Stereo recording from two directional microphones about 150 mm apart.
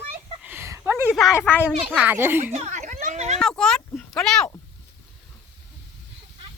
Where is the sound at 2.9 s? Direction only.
55° right (ahead or behind).